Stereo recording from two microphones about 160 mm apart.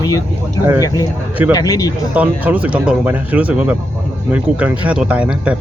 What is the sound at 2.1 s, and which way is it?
Speech, 10° right (ahead or behind).